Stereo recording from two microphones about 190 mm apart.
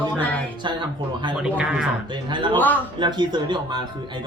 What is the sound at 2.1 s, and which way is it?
Speech, 25° right (ahead or behind).